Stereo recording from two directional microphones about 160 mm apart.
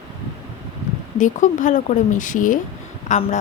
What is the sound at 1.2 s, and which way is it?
A woman's voice, 50° left (ahead or behind).